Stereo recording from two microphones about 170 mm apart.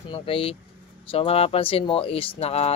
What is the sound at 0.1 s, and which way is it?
Speech, 35° left (ahead or behind).